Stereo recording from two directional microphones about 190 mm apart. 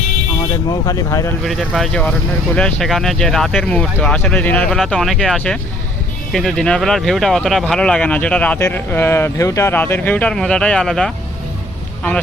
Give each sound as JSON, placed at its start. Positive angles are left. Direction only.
{"t": 0.7, "sound": "speech", "side_deg": 15}
{"t": 1.5, "sound": "speech", "side_deg": 0}